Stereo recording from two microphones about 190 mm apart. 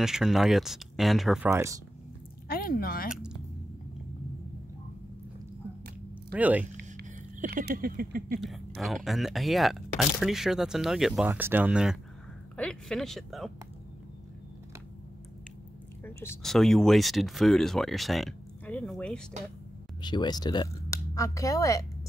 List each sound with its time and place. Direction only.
0.0 s speech: 5° right (ahead or behind)
1.5 s speech: 15° right (ahead or behind)
2.4 s speech: 50° left (ahead or behind)
3.1 s speech: 5° right (ahead or behind)
6.3 s speech: 10° right (ahead or behind)
7.3 s patter: 50° right (ahead or behind)
8.4 s speech: centre (ahead or behind)
16.0 s a sound: 10° left (ahead or behind)
16.4 s speech: centre (ahead or behind)
20.0 s speech: 25° left (ahead or behind)